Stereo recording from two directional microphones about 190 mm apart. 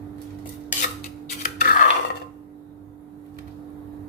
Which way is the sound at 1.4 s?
45° left (ahead or behind).